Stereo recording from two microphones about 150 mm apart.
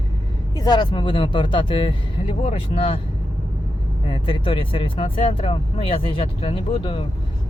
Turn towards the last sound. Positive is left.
turn(degrees=35)  # may be behind; listen again after turning